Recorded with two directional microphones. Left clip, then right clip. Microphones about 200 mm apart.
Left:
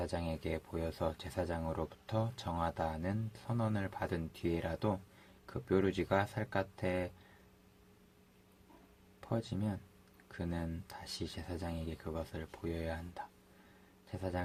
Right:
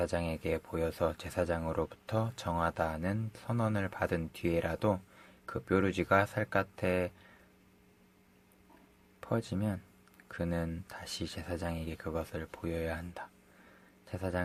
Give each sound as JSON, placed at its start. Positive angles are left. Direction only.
{"t": 0.0, "sound": "speech", "side_deg": -40}
{"t": 9.2, "sound": "speech", "side_deg": -40}